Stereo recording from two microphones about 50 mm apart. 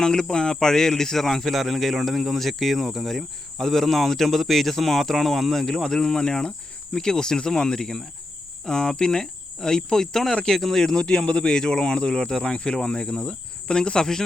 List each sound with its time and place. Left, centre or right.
0.0 s speech: centre